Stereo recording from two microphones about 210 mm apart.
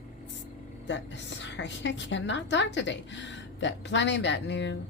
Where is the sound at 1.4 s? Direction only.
60° left (ahead or behind).